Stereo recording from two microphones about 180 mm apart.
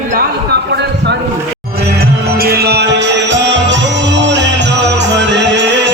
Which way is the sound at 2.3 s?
60° right (ahead or behind).